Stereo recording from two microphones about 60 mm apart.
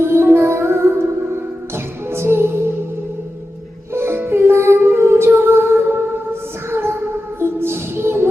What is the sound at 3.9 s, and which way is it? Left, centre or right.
Music, right.